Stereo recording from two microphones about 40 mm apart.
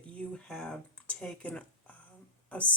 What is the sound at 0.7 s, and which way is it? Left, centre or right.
Speech, left.